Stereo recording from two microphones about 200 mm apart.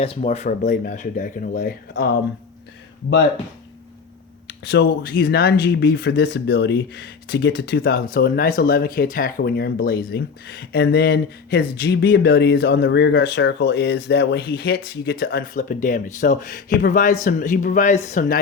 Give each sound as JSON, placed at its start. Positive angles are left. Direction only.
{"t": 0.2, "sound": "speech", "side_deg": 35}
{"t": 4.7, "sound": "speech", "side_deg": 50}